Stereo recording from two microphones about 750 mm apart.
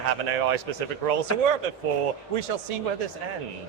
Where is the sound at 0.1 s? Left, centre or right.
Right.